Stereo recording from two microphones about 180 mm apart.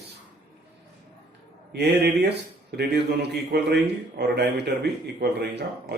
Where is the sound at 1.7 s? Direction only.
65° right (ahead or behind).